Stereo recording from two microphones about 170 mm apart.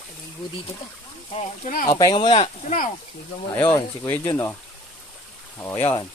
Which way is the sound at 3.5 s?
15° left (ahead or behind).